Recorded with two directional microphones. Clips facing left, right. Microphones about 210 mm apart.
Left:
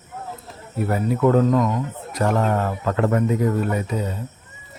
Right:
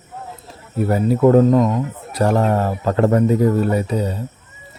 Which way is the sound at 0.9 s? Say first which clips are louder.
Right 5 dB; 30° right (ahead or behind).